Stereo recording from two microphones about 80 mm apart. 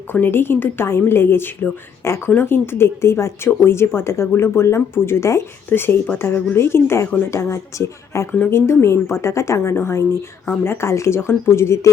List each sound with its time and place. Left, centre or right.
0.1 s a woman's voice: left